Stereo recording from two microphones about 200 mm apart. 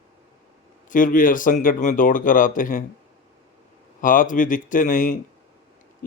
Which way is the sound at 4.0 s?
40° left (ahead or behind).